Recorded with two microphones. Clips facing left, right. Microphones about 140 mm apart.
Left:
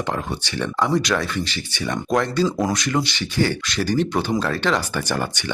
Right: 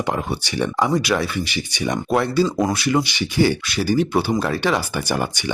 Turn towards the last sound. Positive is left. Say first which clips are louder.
# right 1 dB
turn(degrees=-10)  # may be behind; listen again after turning